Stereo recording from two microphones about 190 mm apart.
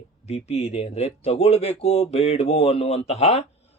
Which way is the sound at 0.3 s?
35° left (ahead or behind).